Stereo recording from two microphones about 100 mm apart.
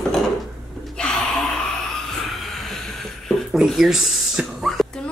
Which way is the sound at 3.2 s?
Centre (ahead or behind).